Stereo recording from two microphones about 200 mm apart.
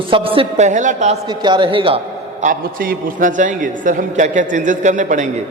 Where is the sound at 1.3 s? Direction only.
25° right (ahead or behind).